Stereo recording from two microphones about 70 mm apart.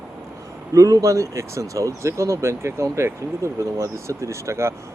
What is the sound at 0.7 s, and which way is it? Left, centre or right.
Speech, right.